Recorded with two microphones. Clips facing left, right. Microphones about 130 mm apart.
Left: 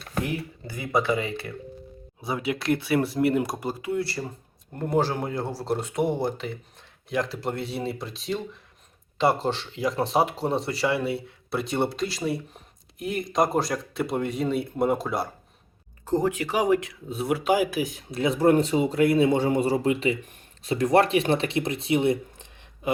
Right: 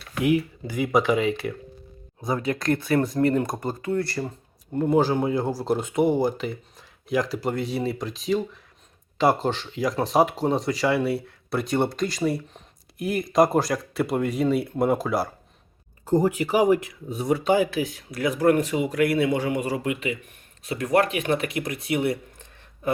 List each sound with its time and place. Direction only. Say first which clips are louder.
0.8 s speech: right 4 dB; 15° right (ahead or behind)
2.2 s speech: right 2 dB; 5° left (ahead or behind)